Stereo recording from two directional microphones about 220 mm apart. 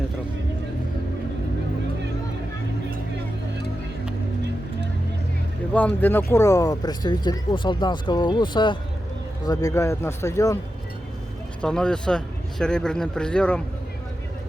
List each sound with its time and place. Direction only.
5.7 s speech: 5° left (ahead or behind)
11.6 s speech: 5° left (ahead or behind)